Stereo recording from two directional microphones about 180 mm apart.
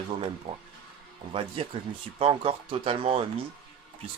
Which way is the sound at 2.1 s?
30° right (ahead or behind).